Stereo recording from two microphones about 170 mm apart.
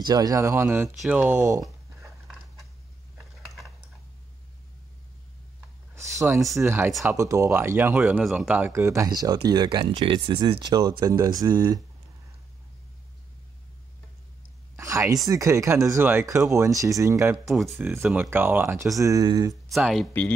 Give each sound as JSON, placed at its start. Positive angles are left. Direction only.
{"t": 0.0, "sound": "speech", "side_deg": -20}
{"t": 5.9, "sound": "a sound", "side_deg": -15}
{"t": 6.6, "sound": "speech", "side_deg": -15}
{"t": 14.8, "sound": "a sound", "side_deg": -15}
{"t": 15.2, "sound": "speech", "side_deg": -20}
{"t": 17.5, "sound": "speech", "side_deg": 0}
{"t": 17.7, "sound": "speech", "side_deg": -15}
{"t": 19.7, "sound": "speech", "side_deg": 0}